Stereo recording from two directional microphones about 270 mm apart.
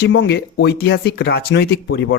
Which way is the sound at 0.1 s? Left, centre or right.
Left.